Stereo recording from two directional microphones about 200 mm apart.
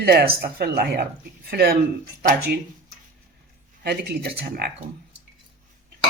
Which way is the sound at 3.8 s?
55° right (ahead or behind).